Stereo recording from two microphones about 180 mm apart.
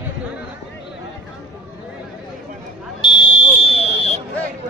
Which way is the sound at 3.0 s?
25° left (ahead or behind).